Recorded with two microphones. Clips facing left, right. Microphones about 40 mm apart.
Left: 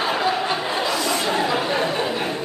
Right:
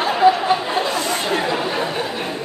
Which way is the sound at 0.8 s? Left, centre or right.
Right.